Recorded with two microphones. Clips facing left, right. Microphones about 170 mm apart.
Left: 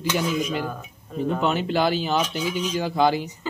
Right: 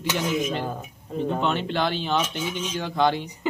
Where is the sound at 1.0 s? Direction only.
25° right (ahead or behind).